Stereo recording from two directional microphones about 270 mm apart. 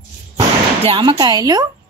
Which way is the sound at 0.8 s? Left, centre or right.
Centre.